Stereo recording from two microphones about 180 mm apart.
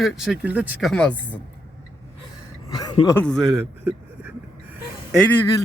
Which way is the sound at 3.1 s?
5° left (ahead or behind).